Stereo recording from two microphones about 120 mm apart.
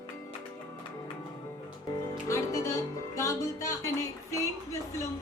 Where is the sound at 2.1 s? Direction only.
25° left (ahead or behind).